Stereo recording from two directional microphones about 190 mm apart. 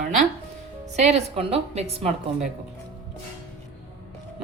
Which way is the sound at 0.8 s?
35° right (ahead or behind).